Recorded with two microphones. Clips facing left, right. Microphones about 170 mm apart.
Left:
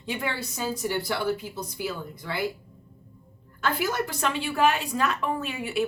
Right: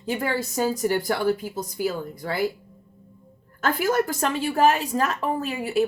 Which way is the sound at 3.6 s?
45° right (ahead or behind).